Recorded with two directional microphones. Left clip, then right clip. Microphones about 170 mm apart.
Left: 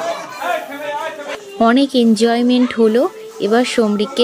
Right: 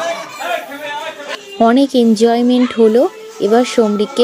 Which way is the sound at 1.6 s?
30° right (ahead or behind).